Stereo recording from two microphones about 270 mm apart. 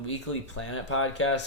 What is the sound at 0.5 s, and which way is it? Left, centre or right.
Speech, left.